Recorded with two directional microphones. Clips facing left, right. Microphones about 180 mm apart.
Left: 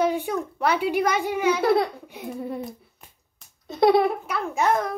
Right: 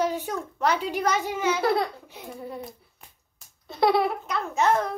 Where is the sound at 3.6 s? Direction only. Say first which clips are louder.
Left 4 dB; 20° left (ahead or behind).